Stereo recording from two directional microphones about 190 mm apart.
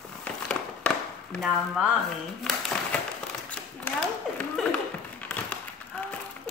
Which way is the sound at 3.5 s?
5° left (ahead or behind).